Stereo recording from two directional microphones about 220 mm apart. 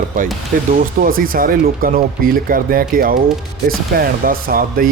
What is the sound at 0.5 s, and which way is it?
Speech, 40° right (ahead or behind).